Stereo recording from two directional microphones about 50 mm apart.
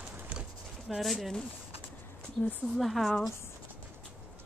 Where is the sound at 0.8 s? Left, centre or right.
Centre.